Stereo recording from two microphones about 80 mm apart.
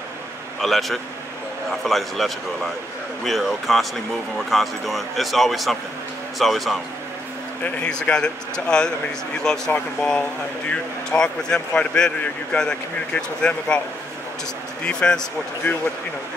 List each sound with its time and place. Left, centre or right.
0.6 s speech: centre
7.6 s speech: centre
14.9 s speech: centre
15.7 s speech: left